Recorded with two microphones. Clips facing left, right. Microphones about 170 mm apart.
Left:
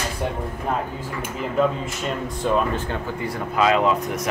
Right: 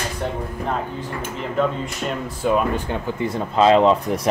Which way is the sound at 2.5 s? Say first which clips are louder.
Right 2 dB; 10° right (ahead or behind).